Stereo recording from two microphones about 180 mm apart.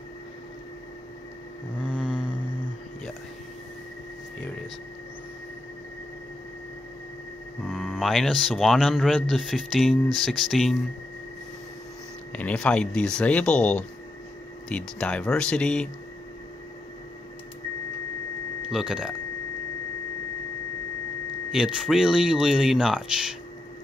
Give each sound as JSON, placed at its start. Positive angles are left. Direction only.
{"t": 1.9, "sound": "vehicle", "side_deg": -5}
{"t": 7.6, "sound": "speech", "side_deg": 0}
{"t": 12.3, "sound": "speech", "side_deg": 5}
{"t": 18.7, "sound": "speech", "side_deg": -5}
{"t": 21.5, "sound": "speech", "side_deg": -5}